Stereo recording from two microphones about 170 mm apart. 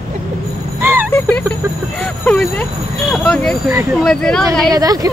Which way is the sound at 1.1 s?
10° left (ahead or behind).